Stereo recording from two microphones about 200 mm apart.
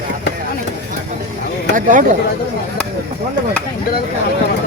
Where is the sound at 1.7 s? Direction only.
40° right (ahead or behind).